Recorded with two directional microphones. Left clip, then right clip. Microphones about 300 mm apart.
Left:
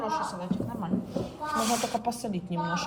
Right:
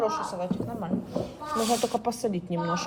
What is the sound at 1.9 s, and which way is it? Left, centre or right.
Speech, right.